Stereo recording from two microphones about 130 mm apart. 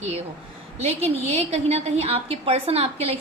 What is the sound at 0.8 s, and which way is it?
A woman's voice, 50° right (ahead or behind).